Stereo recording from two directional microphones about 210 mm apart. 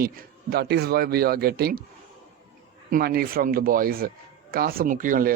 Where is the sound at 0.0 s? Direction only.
45° right (ahead or behind).